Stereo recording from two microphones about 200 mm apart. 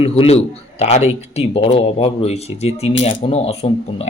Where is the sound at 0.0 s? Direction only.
30° left (ahead or behind).